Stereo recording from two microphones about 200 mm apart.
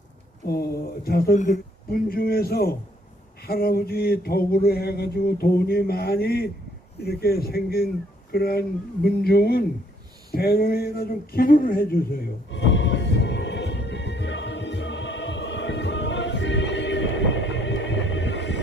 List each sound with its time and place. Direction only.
0.4 s speech: 50° left (ahead or behind)
12.5 s music: 65° left (ahead or behind)